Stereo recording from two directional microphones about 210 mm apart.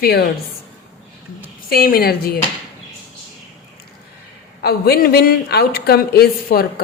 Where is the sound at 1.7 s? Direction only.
45° left (ahead or behind).